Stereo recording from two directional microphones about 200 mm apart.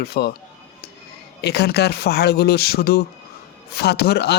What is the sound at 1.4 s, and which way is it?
Speech, 55° left (ahead or behind).